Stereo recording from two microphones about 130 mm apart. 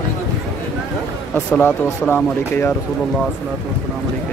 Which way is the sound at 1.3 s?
10° left (ahead or behind).